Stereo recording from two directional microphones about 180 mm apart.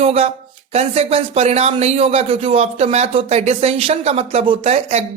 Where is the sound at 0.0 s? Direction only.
35° right (ahead or behind).